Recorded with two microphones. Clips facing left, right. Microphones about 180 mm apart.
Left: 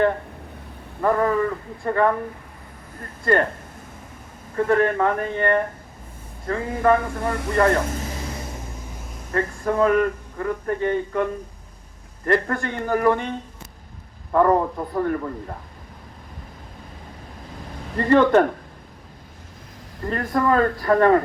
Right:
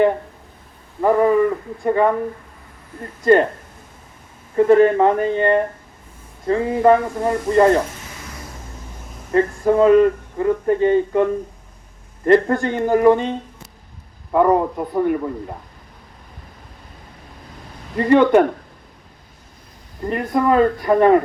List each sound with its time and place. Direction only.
1.0 s speech: 15° right (ahead or behind)
4.5 s speech: 20° right (ahead or behind)
8.1 s vehicle: 30° left (ahead or behind)
9.3 s speech: 20° right (ahead or behind)
14.3 s speech: 10° right (ahead or behind)
17.9 s speech: 10° right (ahead or behind)
20.1 s speech: 15° right (ahead or behind)